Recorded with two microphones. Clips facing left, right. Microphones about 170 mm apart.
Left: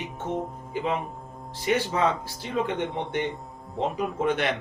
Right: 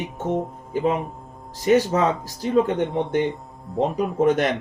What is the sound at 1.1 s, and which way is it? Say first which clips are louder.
Music: even; centre (ahead or behind).